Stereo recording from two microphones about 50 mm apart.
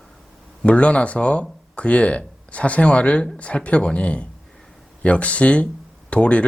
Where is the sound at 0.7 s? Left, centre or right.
Left.